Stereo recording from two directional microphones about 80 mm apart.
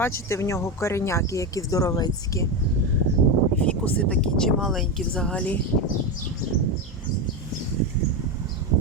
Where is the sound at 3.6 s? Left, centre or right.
Centre.